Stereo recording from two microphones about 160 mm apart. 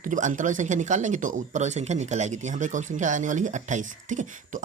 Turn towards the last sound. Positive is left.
turn(degrees=-50)  # may be behind; listen again after turning